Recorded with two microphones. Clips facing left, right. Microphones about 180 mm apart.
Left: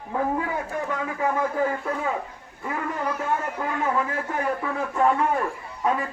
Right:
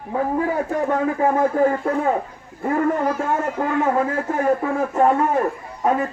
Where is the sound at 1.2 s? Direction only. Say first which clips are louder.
Right 5 dB; 40° right (ahead or behind).